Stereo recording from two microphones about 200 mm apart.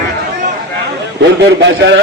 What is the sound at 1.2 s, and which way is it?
Speech, 60° right (ahead or behind).